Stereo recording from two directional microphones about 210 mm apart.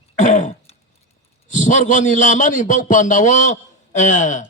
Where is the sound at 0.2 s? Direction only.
35° left (ahead or behind).